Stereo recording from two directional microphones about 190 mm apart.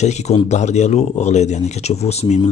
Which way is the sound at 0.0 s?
35° left (ahead or behind).